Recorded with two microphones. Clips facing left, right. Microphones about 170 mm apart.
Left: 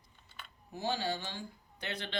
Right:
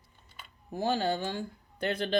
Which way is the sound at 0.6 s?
50° right (ahead or behind).